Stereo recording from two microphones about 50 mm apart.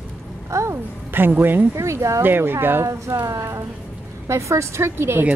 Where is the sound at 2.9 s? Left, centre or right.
Right.